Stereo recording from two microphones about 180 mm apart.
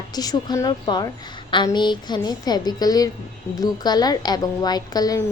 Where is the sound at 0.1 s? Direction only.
20° left (ahead or behind).